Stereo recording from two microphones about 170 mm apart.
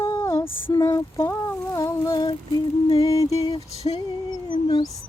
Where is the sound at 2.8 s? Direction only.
30° left (ahead or behind).